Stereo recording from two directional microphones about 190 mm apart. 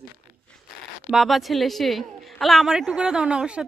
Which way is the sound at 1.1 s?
Centre (ahead or behind).